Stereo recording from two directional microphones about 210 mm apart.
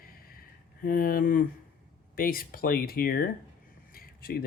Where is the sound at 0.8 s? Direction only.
45° left (ahead or behind).